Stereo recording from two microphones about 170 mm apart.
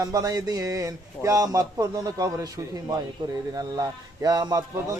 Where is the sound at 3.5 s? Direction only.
20° right (ahead or behind).